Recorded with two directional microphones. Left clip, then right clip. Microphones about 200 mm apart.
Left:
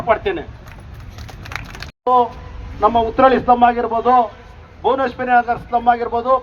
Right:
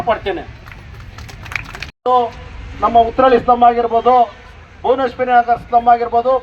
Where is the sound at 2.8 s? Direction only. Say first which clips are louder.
Right 2 dB; 50° right (ahead or behind).